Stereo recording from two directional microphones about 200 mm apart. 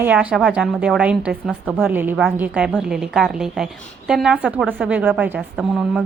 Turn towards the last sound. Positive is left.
turn(degrees=-5)  # may be behind; listen again after turning